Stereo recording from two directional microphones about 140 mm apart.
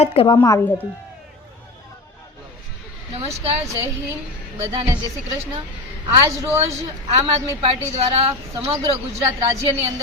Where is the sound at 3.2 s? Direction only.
45° right (ahead or behind).